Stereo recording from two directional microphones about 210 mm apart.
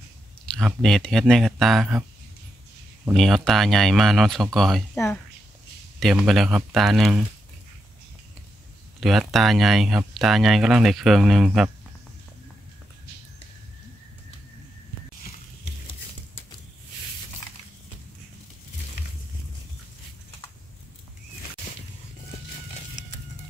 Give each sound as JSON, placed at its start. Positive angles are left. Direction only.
{"t": 0.5, "sound": "speech", "side_deg": 0}
{"t": 3.1, "sound": "speech", "side_deg": 0}
{"t": 4.9, "sound": "speech", "side_deg": 10}
{"t": 5.9, "sound": "speech", "side_deg": 0}
{"t": 9.0, "sound": "speech", "side_deg": 0}